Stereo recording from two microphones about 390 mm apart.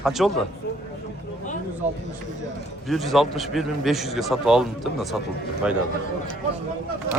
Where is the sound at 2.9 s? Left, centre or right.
Centre.